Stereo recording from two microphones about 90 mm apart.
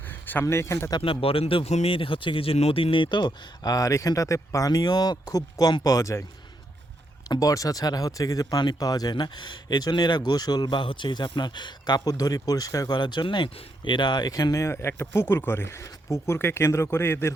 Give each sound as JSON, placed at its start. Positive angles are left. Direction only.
{"t": 0.1, "sound": "a sound", "side_deg": 20}
{"t": 0.4, "sound": "speech", "side_deg": 30}
{"t": 1.0, "sound": "speech", "side_deg": 90}
{"t": 7.3, "sound": "speech", "side_deg": 40}
{"t": 13.0, "sound": "speech", "side_deg": 60}
{"t": 14.7, "sound": "speech", "side_deg": 30}